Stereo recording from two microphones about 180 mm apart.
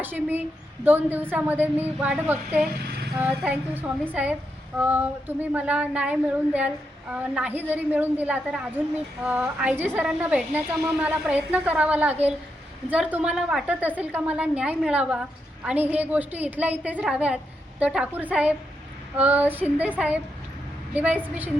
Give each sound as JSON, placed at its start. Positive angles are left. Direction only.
{"t": 0.0, "sound": "a woman's voice", "side_deg": -10}